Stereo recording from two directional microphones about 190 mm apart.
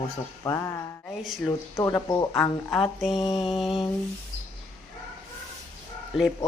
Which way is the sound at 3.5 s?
Centre (ahead or behind).